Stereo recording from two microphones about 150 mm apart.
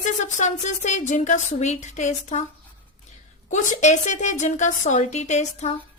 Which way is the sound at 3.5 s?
50° left (ahead or behind).